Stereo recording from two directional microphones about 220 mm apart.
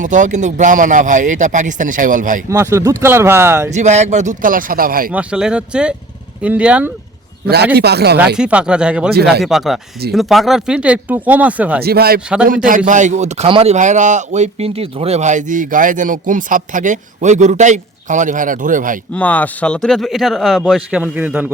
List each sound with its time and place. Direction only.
0.0 s speech: 35° right (ahead or behind)
2.5 s speech: 10° right (ahead or behind)
3.7 s speech: 30° right (ahead or behind)
5.1 s speech: 5° right (ahead or behind)
7.4 s speech: 45° right (ahead or behind)
8.4 s speech: 5° right (ahead or behind)
11.8 s speech: 45° right (ahead or behind)
19.1 s speech: 5° left (ahead or behind)